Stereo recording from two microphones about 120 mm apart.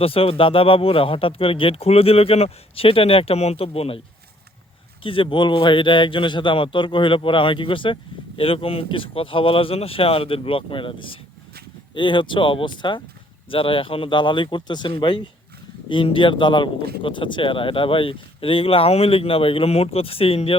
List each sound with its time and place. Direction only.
0.0 s a man's voice: 50° left (ahead or behind)
5.0 s a man's voice: 45° left (ahead or behind)